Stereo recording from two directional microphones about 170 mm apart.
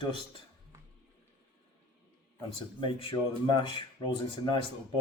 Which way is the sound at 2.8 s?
30° left (ahead or behind).